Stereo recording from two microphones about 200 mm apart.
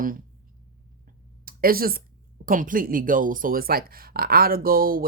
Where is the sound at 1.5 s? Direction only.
45° right (ahead or behind).